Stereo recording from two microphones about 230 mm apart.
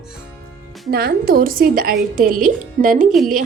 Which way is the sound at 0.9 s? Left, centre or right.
Right.